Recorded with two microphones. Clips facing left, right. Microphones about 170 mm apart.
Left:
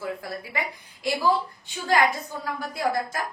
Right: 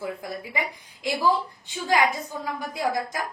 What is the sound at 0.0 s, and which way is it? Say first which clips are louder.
A woman's voice: even; 15° right (ahead or behind).